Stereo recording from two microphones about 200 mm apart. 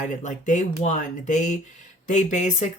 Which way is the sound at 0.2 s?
40° left (ahead or behind).